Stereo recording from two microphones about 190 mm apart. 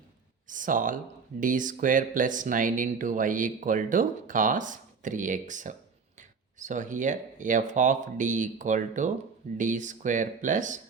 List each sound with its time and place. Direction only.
0.4 s speech: 45° right (ahead or behind)